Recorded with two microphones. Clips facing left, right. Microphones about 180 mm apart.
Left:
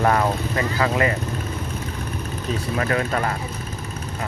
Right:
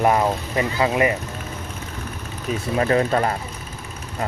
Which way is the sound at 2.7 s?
30° right (ahead or behind).